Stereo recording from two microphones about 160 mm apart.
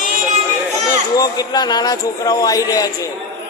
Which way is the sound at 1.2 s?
25° left (ahead or behind).